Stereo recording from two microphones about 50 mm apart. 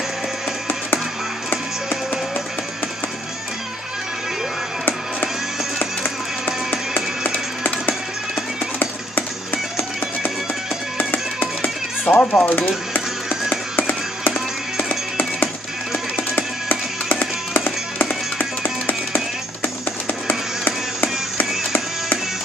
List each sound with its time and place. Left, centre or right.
5.8 s music: left
11.0 s music: left